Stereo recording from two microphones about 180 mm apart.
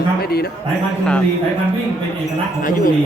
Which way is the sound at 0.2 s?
60° left (ahead or behind).